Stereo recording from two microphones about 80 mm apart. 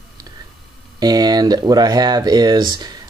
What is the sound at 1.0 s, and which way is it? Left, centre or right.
Speech, right.